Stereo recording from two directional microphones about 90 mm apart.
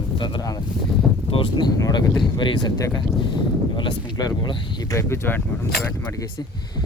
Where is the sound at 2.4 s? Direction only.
60° left (ahead or behind).